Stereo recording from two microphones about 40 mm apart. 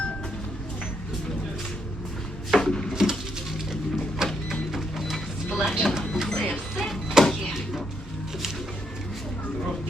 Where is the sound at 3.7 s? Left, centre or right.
Centre.